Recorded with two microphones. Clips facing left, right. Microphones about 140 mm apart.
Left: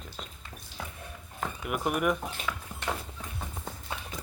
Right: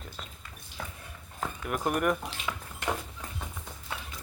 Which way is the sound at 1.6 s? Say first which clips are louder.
Even; 5° left (ahead or behind).